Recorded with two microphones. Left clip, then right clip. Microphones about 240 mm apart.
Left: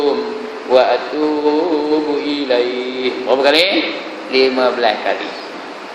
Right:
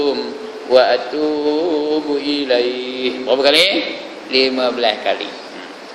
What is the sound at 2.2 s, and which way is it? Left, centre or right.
A man's voice, right.